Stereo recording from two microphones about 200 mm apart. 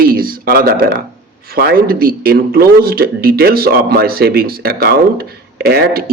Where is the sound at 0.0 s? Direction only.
45° right (ahead or behind).